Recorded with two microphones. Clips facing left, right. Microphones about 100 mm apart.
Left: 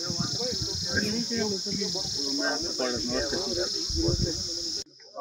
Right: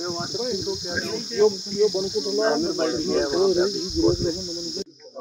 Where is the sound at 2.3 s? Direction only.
35° right (ahead or behind).